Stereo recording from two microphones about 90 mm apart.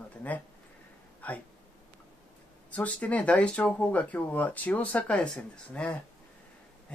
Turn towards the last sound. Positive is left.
turn(degrees=10)  # may be behind; listen again after turning